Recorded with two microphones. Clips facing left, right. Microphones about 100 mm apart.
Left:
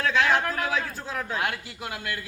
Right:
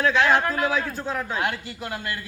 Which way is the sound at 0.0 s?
Centre (ahead or behind).